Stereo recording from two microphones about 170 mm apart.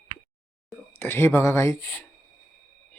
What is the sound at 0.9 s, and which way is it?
Speech, 15° left (ahead or behind).